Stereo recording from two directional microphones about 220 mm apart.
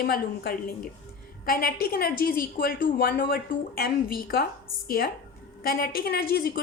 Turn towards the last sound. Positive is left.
turn(degrees=45)  # may be behind; listen again after turning